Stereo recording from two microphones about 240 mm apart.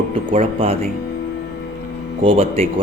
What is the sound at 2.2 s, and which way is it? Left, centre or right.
Speech, right.